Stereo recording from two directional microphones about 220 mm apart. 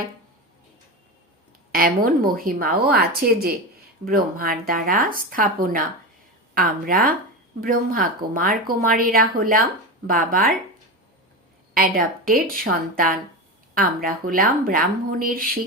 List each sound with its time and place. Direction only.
1.7 s a woman's voice: 40° right (ahead or behind)
11.7 s a woman's voice: 40° right (ahead or behind)